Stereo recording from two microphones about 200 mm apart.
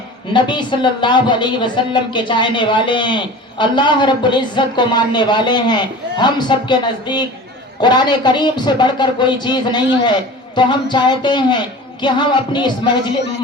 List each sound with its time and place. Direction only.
0.3 s a woman's voice: 25° left (ahead or behind)